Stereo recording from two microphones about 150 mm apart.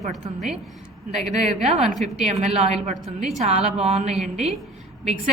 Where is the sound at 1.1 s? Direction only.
45° right (ahead or behind).